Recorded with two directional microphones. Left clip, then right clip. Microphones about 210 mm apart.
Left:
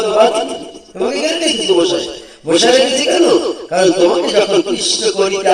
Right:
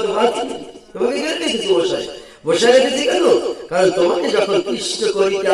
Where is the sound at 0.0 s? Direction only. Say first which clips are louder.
Left 5 dB; 45° left (ahead or behind).